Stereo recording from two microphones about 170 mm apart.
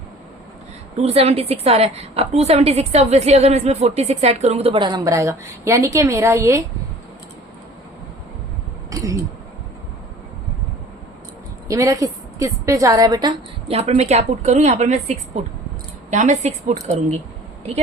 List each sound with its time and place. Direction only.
0.9 s a woman's voice: 35° right (ahead or behind); by 6.7 s 15° right (ahead or behind)
8.9 s a sound: 20° right (ahead or behind)
11.7 s a woman's voice: 20° right (ahead or behind)
13.7 s a woman's voice: 40° right (ahead or behind)